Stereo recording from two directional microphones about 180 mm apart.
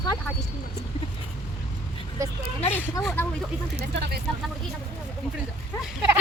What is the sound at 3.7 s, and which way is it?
Speech, 65° right (ahead or behind).